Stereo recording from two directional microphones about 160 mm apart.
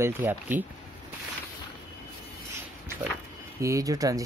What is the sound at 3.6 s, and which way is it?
Speech, 20° right (ahead or behind).